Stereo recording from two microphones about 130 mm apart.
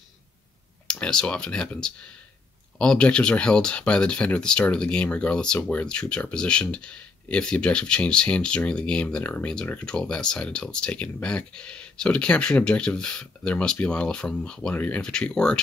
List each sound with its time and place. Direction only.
0.8 s speech: 5° left (ahead or behind)